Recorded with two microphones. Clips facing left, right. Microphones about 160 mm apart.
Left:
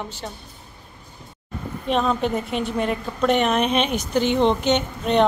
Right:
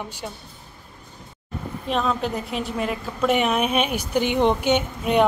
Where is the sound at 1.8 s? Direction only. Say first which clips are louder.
Left 3 dB; centre (ahead or behind).